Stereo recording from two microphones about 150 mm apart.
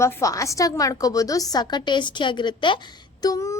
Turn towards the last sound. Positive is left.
turn(degrees=25)  # may be behind; listen again after turning